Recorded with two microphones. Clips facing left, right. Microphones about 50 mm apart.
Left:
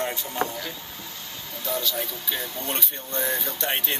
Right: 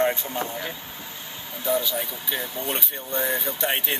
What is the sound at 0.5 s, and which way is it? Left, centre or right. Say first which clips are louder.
Speech: right 2 dB; right.